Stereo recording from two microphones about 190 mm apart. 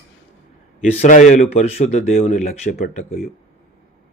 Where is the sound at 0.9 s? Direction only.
40° left (ahead or behind).